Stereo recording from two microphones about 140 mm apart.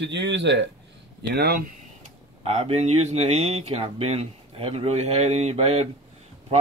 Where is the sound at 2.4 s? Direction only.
50° right (ahead or behind).